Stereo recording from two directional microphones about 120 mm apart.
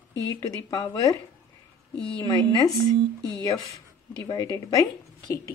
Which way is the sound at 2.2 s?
30° left (ahead or behind).